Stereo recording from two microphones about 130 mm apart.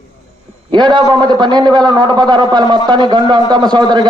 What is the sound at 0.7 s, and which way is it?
A man's voice, 35° right (ahead or behind).